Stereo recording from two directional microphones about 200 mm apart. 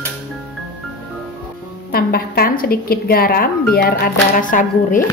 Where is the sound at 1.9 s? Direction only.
50° left (ahead or behind).